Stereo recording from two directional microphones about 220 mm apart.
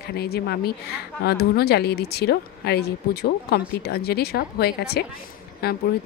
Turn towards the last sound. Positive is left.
turn(degrees=45)  # may be behind; listen again after turning